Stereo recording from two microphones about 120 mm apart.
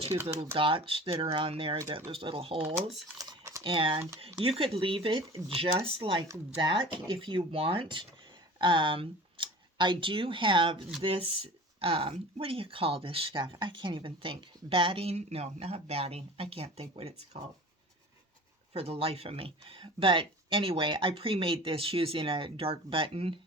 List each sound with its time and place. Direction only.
0.1 s speech: 40° right (ahead or behind)
1.8 s speech: 25° right (ahead or behind)
2.0 s speech: 45° right (ahead or behind)
3.2 s typing: 30° right (ahead or behind)
3.6 s speech: 45° right (ahead or behind)
18.7 s speech: 55° right (ahead or behind)